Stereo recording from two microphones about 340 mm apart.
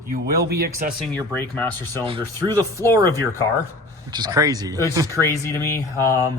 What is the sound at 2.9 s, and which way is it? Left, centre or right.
Speech, centre.